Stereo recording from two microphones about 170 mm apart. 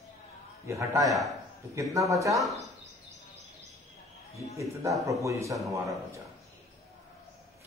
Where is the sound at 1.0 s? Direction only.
Centre (ahead or behind).